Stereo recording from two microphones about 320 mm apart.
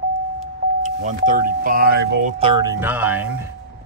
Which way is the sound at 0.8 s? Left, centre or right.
Right.